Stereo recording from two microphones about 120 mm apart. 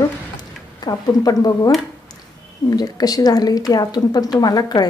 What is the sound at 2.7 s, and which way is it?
Speech, 35° left (ahead or behind).